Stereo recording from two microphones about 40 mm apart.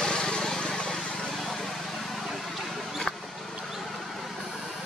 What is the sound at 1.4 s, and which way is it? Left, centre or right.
Vehicle, centre.